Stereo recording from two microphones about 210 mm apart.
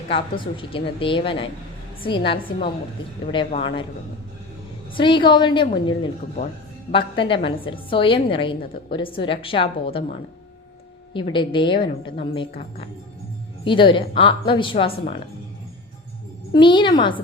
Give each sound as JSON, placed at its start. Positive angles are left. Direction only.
{"t": 0.1, "sound": "a woman's voice", "side_deg": 25}
{"t": 4.9, "sound": "a woman's voice", "side_deg": 25}
{"t": 16.5, "sound": "a woman's voice", "side_deg": 20}